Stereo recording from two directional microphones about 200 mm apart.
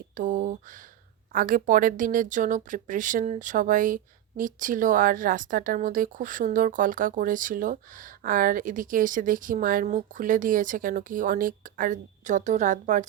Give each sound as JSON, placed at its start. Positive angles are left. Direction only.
{"t": 0.2, "sound": "speech", "side_deg": -40}